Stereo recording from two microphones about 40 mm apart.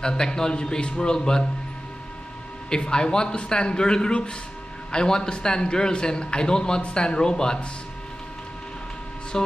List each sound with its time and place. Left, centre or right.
0.0 s a man's voice: centre
2.7 s a man's voice: left
9.3 s music: centre